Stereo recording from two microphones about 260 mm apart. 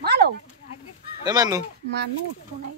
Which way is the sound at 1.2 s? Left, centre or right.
Centre.